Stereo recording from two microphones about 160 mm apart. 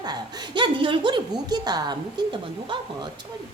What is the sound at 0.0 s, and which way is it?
A woman's voice, 25° right (ahead or behind).